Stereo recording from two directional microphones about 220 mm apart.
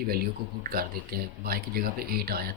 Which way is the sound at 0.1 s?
45° right (ahead or behind).